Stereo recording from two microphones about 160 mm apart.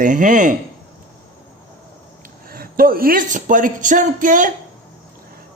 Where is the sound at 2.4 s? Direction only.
65° right (ahead or behind).